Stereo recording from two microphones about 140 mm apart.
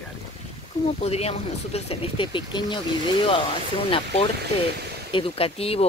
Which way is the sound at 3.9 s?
40° left (ahead or behind).